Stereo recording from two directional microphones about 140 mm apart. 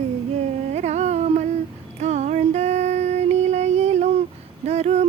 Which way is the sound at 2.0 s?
55° right (ahead or behind).